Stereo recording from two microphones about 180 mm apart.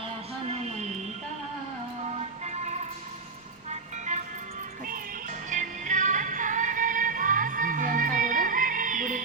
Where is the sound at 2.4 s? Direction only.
40° right (ahead or behind).